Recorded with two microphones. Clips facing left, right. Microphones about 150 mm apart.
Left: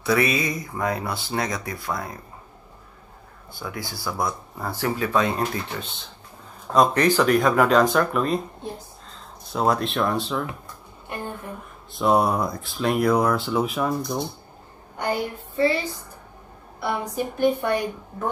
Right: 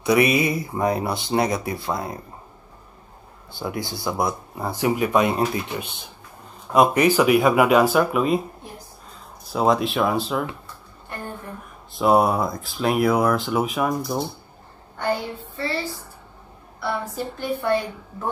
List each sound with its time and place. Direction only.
0.0 s speech: 20° right (ahead or behind)
3.5 s speech: 25° right (ahead or behind); by 8.5 s 5° right (ahead or behind)
9.5 s speech: centre (ahead or behind)
11.1 s a sound: 15° left (ahead or behind)
11.9 s speech: centre (ahead or behind)
15.0 s a woman's voice: 15° left (ahead or behind)